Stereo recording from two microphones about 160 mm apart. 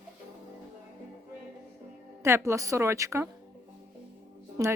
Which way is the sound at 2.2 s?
20° right (ahead or behind).